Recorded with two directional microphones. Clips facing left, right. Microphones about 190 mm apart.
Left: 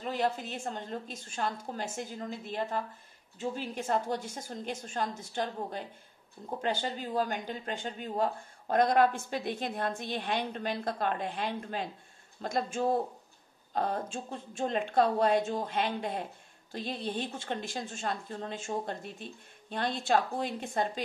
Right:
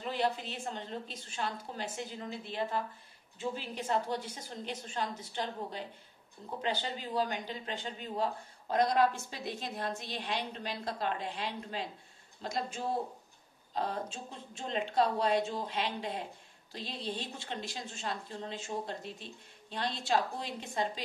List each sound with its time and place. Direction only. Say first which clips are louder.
0.0 s speech: left 2 dB; 45° left (ahead or behind)